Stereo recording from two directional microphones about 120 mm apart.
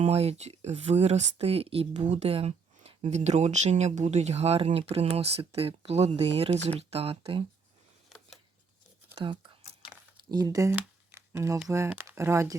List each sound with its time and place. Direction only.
0.0 s speech: 60° right (ahead or behind)
8.1 s a sound: centre (ahead or behind)
9.1 s speech: 45° right (ahead or behind)
10.3 s speech: 30° right (ahead or behind)
11.1 s a sound: 25° right (ahead or behind)
12.0 s speech: 25° right (ahead or behind)